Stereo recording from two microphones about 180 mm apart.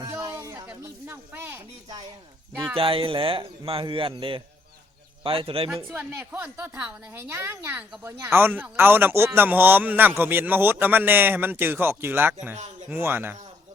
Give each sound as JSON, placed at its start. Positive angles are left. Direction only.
{"t": 0.0, "sound": "music", "side_deg": -15}
{"t": 2.7, "sound": "a man's voice", "side_deg": -30}
{"t": 5.7, "sound": "speech", "side_deg": -5}